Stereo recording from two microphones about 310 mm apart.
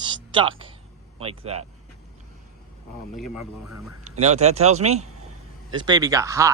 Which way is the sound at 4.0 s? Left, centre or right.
Right.